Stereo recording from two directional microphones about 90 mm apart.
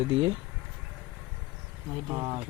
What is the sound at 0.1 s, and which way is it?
Speech, 70° right (ahead or behind).